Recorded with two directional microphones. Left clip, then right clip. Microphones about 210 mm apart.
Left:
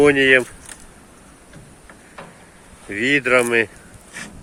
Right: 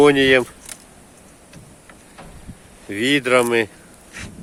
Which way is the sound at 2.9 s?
20° right (ahead or behind).